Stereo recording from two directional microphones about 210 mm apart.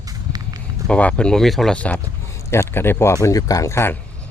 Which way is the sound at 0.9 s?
5° left (ahead or behind).